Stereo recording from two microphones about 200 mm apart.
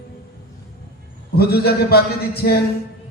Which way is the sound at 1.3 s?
50° left (ahead or behind).